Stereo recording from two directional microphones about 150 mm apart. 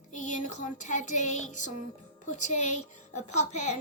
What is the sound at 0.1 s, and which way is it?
Music, 55° left (ahead or behind).